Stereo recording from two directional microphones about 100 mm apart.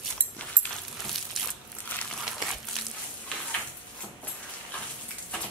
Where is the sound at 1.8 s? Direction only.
15° left (ahead or behind).